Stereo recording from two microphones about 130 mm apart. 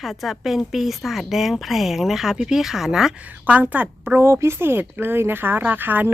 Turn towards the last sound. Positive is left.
turn(degrees=-15)  # may be behind; listen again after turning